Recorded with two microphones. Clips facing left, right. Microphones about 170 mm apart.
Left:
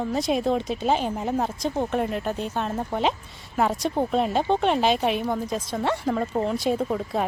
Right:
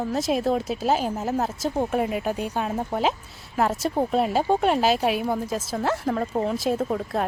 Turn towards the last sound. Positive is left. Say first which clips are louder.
# even
turn(degrees=0)  # may be behind; listen again after turning